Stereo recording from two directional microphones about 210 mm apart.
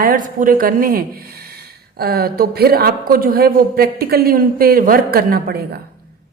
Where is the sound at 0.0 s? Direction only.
40° right (ahead or behind).